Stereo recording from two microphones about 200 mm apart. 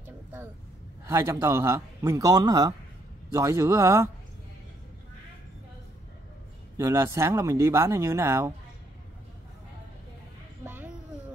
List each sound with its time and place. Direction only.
1.0 s speech: 15° right (ahead or behind)
6.8 s speech: 15° right (ahead or behind)
10.6 s a sound: 10° right (ahead or behind)